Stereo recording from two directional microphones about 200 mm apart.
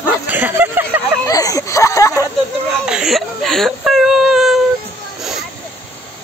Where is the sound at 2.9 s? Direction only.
Centre (ahead or behind).